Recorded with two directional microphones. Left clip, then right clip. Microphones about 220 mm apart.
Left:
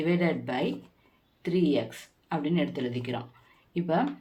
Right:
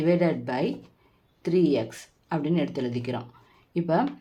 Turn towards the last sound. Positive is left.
turn(degrees=-50)  # may be behind; listen again after turning